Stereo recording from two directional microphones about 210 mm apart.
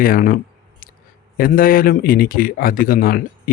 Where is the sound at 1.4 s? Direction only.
45° left (ahead or behind).